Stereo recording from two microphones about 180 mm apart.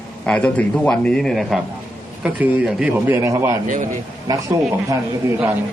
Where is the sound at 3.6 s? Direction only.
45° right (ahead or behind).